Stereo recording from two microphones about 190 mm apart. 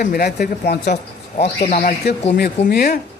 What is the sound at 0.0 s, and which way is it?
Speech, 50° left (ahead or behind).